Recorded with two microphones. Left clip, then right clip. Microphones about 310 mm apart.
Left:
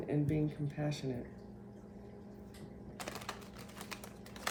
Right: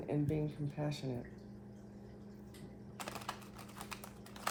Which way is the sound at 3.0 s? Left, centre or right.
Centre.